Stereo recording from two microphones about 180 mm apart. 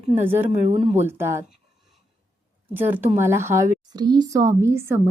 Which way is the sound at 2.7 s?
10° right (ahead or behind).